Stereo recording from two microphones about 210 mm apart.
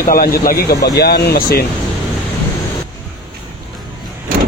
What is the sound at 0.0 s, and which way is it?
Speech, 45° left (ahead or behind).